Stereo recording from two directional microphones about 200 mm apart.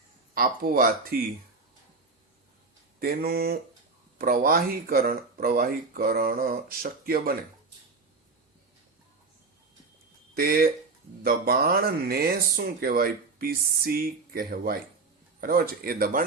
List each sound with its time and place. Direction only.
0.3 s speech: 45° right (ahead or behind)
3.0 s speech: 50° right (ahead or behind)
10.3 s speech: 50° right (ahead or behind)